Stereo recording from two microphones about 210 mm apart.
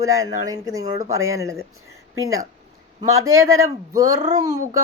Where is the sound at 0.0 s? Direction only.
15° right (ahead or behind).